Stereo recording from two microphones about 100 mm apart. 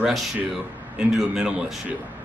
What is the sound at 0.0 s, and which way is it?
A man's voice, 5° right (ahead or behind).